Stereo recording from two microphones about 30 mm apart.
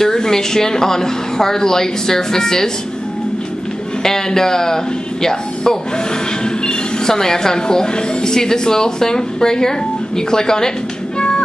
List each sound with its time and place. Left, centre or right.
0.0 s speech: centre
4.0 s speech: centre
6.4 s music: left
7.1 s a woman's voice: centre
11.1 s music: left